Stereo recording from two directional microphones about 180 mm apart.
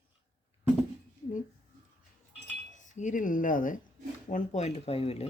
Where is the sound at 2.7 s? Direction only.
45° left (ahead or behind).